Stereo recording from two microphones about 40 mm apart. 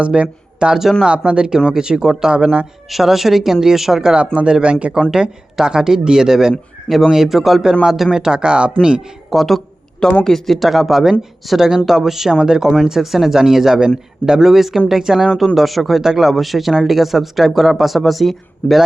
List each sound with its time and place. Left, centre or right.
0.0 s speech: right
1.5 s speech: centre
2.9 s speech: centre
4.1 s speech: right
5.1 s speech: centre
8.2 s speech: right
9.3 s speech: centre
10.7 s speech: centre